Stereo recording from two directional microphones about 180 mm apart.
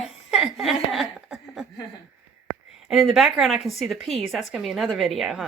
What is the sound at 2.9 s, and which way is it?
A woman's voice, centre (ahead or behind).